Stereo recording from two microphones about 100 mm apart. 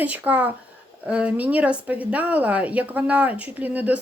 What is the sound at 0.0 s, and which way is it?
Speech, 15° right (ahead or behind).